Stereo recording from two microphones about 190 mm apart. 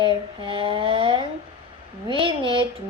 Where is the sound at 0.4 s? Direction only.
25° right (ahead or behind).